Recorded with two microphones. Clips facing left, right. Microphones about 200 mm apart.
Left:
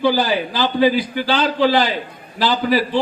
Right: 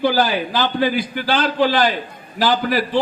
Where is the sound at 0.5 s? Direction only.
50° right (ahead or behind).